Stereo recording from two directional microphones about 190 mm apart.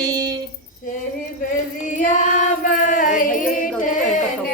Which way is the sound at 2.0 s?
40° left (ahead or behind).